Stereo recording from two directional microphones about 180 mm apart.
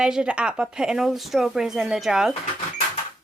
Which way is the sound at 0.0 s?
5° right (ahead or behind).